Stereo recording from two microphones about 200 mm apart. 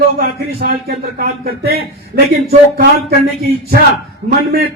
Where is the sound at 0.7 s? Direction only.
50° right (ahead or behind).